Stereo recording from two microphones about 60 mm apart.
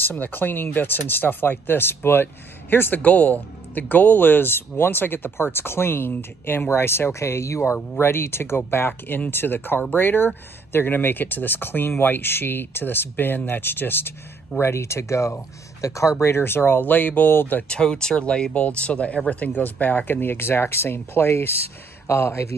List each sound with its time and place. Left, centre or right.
0.0 s speech: left
14.6 s speech: left
17.6 s speech: centre; by 22.5 s left